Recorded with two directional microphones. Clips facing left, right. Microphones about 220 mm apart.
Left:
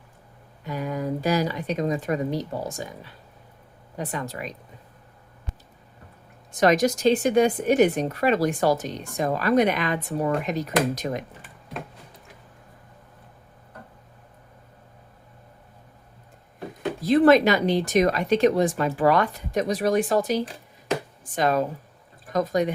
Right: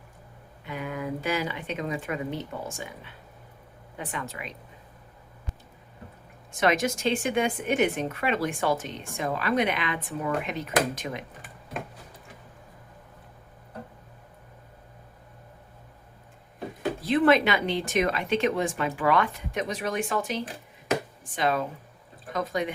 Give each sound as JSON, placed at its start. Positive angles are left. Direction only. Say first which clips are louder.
{"t": 0.6, "sound": "speech", "louder": "left 5 dB", "side_deg": 40}
{"t": 6.5, "sound": "speech", "louder": "left 5 dB", "side_deg": 40}
{"t": 17.0, "sound": "speech", "louder": "left 5 dB", "side_deg": 40}